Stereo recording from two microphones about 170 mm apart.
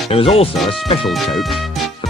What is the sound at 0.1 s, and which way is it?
Speech, 35° left (ahead or behind).